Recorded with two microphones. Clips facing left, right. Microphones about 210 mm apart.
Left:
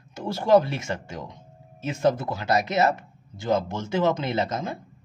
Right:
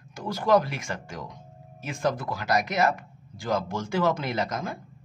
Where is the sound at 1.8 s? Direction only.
25° left (ahead or behind).